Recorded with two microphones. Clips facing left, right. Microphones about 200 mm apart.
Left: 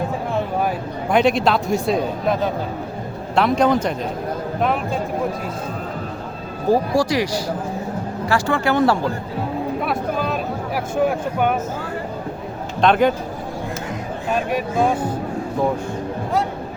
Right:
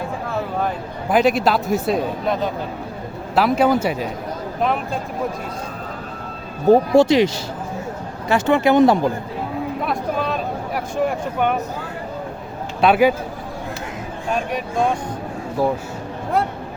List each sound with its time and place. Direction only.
1.1 s a man's voice: 5° right (ahead or behind)
6.7 s speech: 25° right (ahead or behind)
9.8 s a man's voice: centre (ahead or behind)
12.8 s a man's voice: 5° right (ahead or behind)
14.3 s a man's voice: centre (ahead or behind)